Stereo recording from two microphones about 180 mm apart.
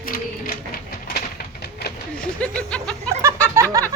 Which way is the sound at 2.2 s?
5° left (ahead or behind).